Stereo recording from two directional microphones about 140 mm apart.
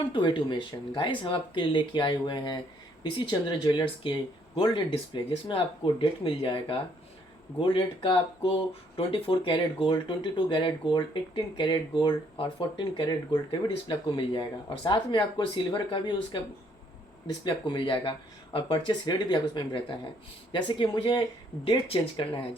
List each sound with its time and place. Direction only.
0.1 s speech: 35° left (ahead or behind)
17.4 s speech: 35° left (ahead or behind)